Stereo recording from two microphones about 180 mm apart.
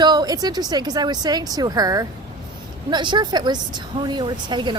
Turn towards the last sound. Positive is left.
turn(degrees=-25)  # may be behind; listen again after turning